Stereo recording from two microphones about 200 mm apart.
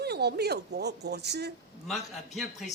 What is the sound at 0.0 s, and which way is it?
Speech, 55° right (ahead or behind).